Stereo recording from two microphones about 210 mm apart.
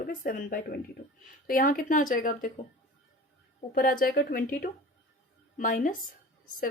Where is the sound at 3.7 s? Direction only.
45° left (ahead or behind).